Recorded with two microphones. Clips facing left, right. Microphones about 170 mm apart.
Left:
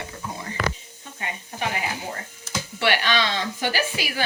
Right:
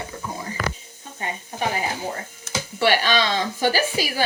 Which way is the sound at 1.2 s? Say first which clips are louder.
Right 3 dB; 40° right (ahead or behind).